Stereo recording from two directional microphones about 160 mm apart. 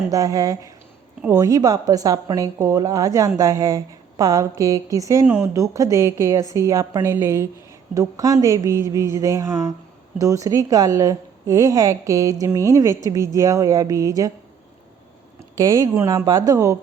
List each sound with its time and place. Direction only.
0.1 s a woman's voice: 20° right (ahead or behind)
15.5 s a woman's voice: 20° right (ahead or behind)